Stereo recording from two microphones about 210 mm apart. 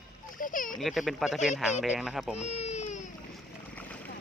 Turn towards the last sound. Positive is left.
turn(degrees=5)  # may be behind; listen again after turning